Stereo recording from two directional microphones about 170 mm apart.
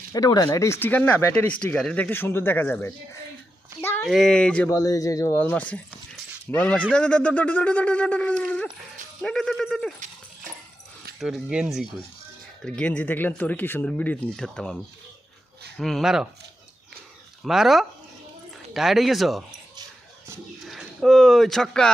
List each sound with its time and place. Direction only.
0.1 s speech: 20° left (ahead or behind)
3.8 s a sound: 10° left (ahead or behind)
4.1 s speech: 5° left (ahead or behind)
4.7 s speech: 20° left (ahead or behind); by 9.9 s centre (ahead or behind)
11.2 s speech: centre (ahead or behind)
15.8 s speech: centre (ahead or behind)
17.4 s speech: centre (ahead or behind)
20.7 s speech: centre (ahead or behind)